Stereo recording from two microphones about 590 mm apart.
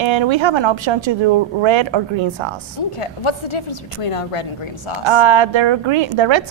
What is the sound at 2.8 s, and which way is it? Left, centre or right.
A woman's voice, left.